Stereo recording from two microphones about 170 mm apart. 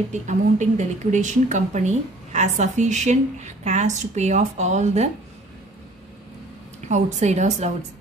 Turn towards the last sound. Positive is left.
turn(degrees=-45)  # may be behind; listen again after turning